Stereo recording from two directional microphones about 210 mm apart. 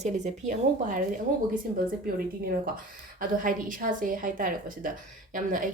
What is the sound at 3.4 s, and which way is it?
Speech, 40° right (ahead or behind).